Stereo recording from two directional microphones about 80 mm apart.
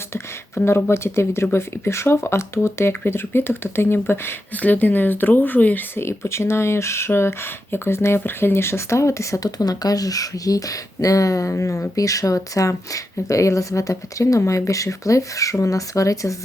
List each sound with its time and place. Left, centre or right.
0.1 s speech: left
6.0 s speech: left